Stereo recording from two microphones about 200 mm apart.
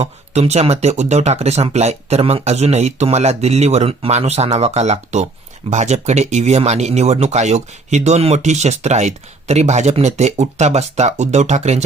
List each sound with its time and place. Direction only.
0.0 s speech: 35° right (ahead or behind)